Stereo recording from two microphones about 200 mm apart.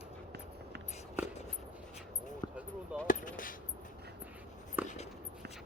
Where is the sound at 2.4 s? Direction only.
20° left (ahead or behind).